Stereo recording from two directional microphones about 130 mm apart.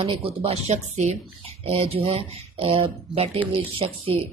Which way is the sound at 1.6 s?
45° right (ahead or behind).